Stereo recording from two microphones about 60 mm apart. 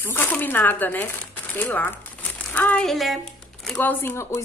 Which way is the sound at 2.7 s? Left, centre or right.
Centre.